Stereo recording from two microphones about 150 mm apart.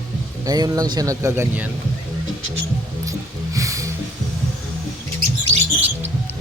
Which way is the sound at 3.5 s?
20° right (ahead or behind).